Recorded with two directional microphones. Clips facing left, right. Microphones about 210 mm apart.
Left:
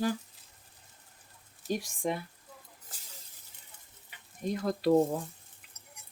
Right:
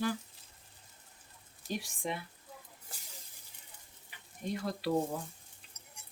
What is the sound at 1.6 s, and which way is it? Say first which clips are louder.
Speech: left 5 dB; centre (ahead or behind).